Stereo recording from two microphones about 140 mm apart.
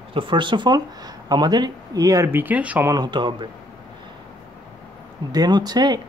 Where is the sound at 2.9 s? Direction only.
30° right (ahead or behind).